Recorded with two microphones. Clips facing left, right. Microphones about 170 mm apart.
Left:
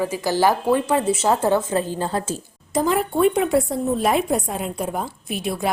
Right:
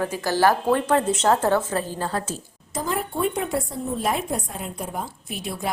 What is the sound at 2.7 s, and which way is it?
A woman's voice, 75° left (ahead or behind).